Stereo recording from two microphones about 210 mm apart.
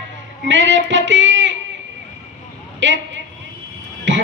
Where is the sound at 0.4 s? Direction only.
60° right (ahead or behind).